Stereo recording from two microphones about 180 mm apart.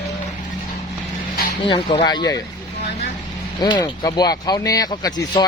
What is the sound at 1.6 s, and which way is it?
Speech, 30° left (ahead or behind).